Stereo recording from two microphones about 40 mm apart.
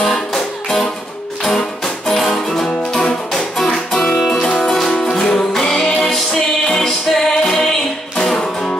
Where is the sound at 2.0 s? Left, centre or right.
Centre.